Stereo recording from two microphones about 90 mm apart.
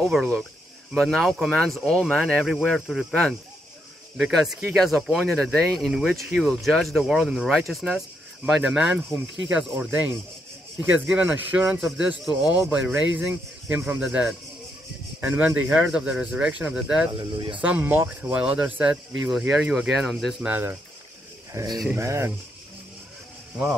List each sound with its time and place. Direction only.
0.0 s speech: centre (ahead or behind)
8.5 s speech: 10° right (ahead or behind)
9.8 s speech: 20° right (ahead or behind)
15.1 s speech: 20° right (ahead or behind)
17.1 s speech: 60° right (ahead or behind)
17.6 s speech: 20° right (ahead or behind)
19.2 s speech: 5° right (ahead or behind)
20.4 s speech: 20° right (ahead or behind)
21.5 s speech: 35° right (ahead or behind)